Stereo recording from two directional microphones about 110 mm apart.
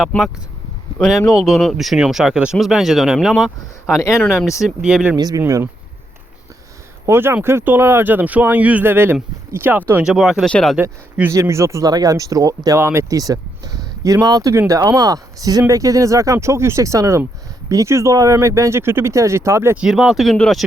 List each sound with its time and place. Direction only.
0.9 s speech: 5° left (ahead or behind)
5.1 s speech: 35° right (ahead or behind)
7.1 s speech: 20° right (ahead or behind)
10.1 s speech: 5° right (ahead or behind)
10.4 s speech: 5° left (ahead or behind)
11.3 s speech: 25° right (ahead or behind)
12.8 s speech: 25° right (ahead or behind)
19.7 s speech: 5° right (ahead or behind)
20.3 s speech: 10° left (ahead or behind)